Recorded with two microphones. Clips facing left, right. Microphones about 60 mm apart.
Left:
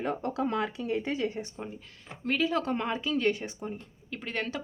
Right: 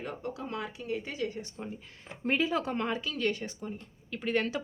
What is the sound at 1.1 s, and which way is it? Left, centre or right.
Speech, left.